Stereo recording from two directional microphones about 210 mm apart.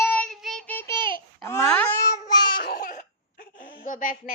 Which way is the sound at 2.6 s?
45° left (ahead or behind).